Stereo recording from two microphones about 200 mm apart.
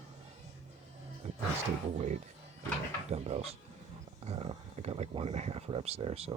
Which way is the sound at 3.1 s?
30° right (ahead or behind).